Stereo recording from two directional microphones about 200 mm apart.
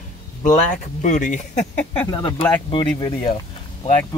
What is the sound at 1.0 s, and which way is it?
Speech, 40° left (ahead or behind).